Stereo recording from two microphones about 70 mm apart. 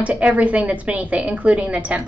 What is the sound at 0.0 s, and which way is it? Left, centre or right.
A woman's voice, centre.